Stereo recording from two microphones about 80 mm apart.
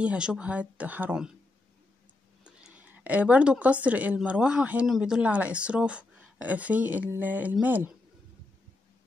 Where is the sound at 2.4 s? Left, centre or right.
Centre.